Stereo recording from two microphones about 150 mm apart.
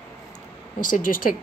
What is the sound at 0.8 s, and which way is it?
Speech, 60° left (ahead or behind).